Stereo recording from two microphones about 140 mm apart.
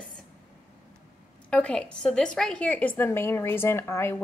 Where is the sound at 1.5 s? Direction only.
10° left (ahead or behind).